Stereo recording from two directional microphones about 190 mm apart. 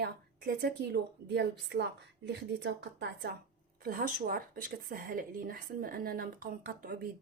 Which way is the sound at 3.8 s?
50° right (ahead or behind).